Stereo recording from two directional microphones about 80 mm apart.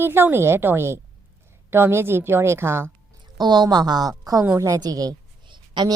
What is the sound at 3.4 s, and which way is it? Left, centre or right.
A woman's voice, right.